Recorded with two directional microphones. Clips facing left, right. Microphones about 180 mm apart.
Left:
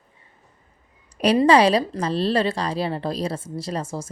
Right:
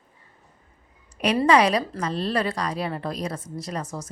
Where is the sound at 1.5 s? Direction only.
30° left (ahead or behind).